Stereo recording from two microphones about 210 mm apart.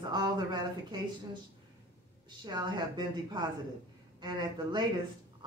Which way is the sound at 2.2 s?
20° right (ahead or behind).